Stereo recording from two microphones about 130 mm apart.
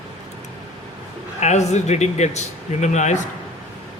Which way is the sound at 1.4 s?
60° left (ahead or behind).